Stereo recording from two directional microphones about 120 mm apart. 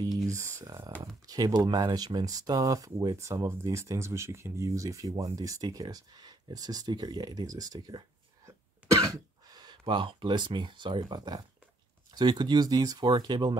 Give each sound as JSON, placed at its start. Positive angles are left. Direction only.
{"t": 0.3, "sound": "speech", "side_deg": -25}
{"t": 8.5, "sound": "throat clearing", "side_deg": -25}
{"t": 12.1, "sound": "speech", "side_deg": -35}